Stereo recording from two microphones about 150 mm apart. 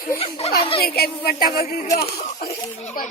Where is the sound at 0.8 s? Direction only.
90° left.